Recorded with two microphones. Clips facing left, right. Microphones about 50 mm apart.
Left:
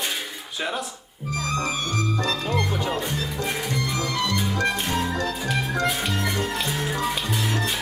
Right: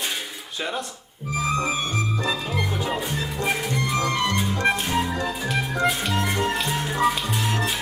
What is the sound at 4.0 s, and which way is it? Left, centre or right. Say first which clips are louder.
Music: right 4 dB; right.